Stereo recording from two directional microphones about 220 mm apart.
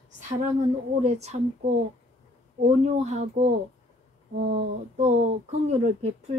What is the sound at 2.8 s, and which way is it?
A woman's voice, 30° right (ahead or behind).